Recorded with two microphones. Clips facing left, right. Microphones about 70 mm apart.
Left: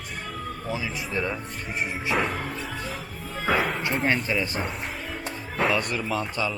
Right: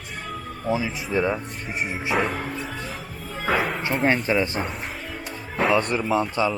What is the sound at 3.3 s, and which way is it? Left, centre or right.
Music, centre.